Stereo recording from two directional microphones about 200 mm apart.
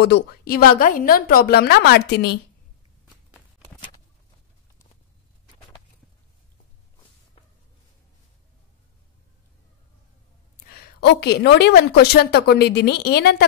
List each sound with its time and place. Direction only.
0.0 s a woman's voice: 55° left (ahead or behind)
10.6 s a woman's voice: 50° left (ahead or behind)